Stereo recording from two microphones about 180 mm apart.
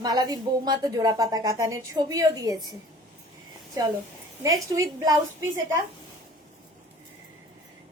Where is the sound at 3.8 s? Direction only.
20° right (ahead or behind).